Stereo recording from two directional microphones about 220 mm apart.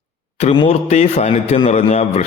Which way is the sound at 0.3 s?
25° left (ahead or behind).